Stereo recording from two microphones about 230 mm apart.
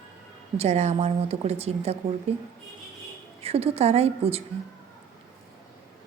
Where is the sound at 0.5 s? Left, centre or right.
Right.